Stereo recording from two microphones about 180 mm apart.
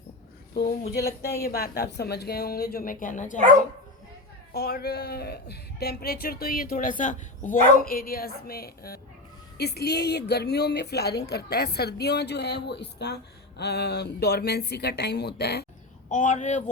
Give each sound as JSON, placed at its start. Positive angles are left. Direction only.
{"t": 0.5, "sound": "speech", "side_deg": 60}
{"t": 4.5, "sound": "speech", "side_deg": 60}
{"t": 7.8, "sound": "speech", "side_deg": 55}
{"t": 16.0, "sound": "speech", "side_deg": 45}